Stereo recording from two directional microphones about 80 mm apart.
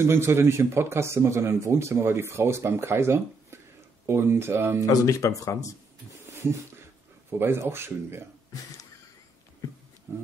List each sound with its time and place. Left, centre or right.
0.0 s speech: right
4.8 s speech: left
6.2 s a sound: right
7.2 s speech: right
10.1 s speech: right